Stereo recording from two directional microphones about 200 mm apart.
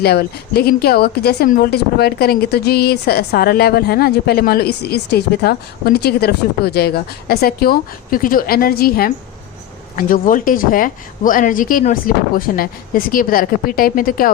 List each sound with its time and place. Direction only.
0.0 s a woman's voice: 50° left (ahead or behind)